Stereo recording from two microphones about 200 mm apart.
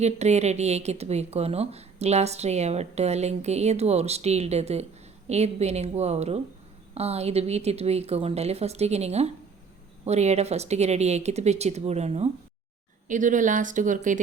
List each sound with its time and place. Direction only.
0.0 s a woman's voice: 35° right (ahead or behind)